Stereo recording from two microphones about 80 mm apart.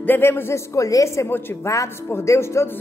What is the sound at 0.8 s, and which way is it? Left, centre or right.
A woman's voice, left.